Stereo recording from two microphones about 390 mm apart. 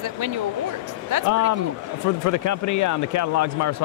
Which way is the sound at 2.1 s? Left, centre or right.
Left.